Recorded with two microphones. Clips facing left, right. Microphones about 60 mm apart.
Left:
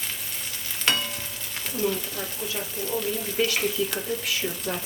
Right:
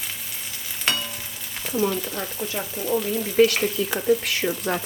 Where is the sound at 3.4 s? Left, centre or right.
Right.